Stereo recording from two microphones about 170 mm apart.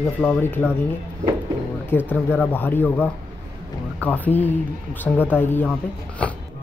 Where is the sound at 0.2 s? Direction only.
10° left (ahead or behind).